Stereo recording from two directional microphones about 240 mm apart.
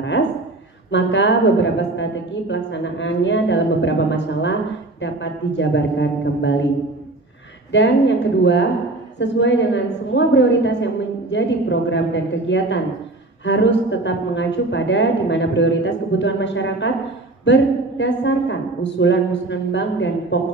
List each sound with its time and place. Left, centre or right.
0.9 s a woman's voice: left
7.7 s a woman's voice: left